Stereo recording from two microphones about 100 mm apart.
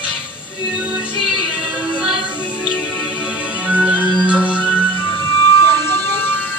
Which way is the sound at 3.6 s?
10° right (ahead or behind).